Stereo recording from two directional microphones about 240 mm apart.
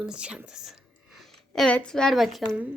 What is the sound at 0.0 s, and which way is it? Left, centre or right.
Speech, centre.